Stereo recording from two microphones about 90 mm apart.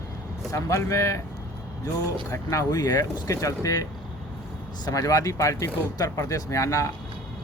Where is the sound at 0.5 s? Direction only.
35° left (ahead or behind).